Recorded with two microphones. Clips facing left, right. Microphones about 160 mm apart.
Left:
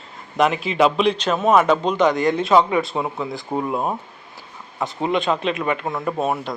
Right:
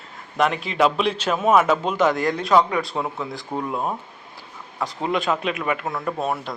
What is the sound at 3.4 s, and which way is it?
Speech, 20° left (ahead or behind).